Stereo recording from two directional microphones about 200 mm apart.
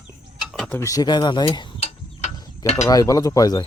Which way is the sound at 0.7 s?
15° left (ahead or behind).